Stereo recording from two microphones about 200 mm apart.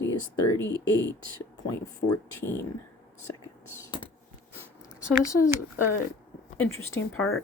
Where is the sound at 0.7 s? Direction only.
20° right (ahead or behind).